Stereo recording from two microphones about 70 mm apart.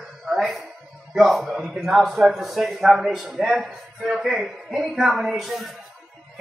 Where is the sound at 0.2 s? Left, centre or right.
Centre.